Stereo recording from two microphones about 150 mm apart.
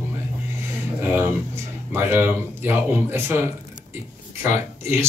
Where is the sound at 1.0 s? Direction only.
15° right (ahead or behind).